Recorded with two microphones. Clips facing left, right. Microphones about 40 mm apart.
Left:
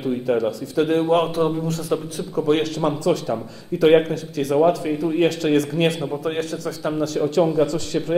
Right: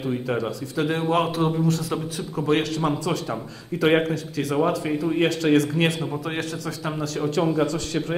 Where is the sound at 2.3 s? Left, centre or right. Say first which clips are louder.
Left 3 dB; right.